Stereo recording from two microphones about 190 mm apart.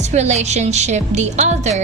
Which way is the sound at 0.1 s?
35° right (ahead or behind).